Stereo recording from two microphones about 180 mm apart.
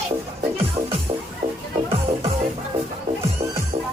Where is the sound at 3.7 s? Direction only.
45° right (ahead or behind).